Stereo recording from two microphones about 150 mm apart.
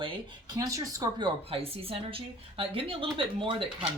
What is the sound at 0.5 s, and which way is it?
A woman's voice, 25° right (ahead or behind).